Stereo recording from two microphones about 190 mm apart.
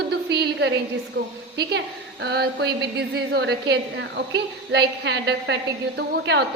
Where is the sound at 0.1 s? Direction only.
60° right (ahead or behind).